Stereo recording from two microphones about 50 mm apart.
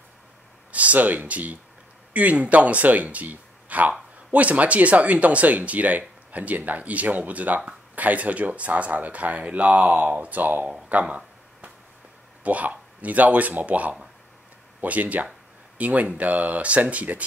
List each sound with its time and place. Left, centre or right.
0.7 s a man's voice: right
10.9 s a sound: right
12.4 s speech: right